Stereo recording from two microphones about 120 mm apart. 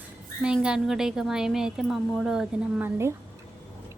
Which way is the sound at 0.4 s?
5° right (ahead or behind).